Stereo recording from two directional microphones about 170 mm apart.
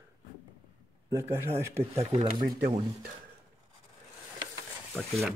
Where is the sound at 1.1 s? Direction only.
15° right (ahead or behind).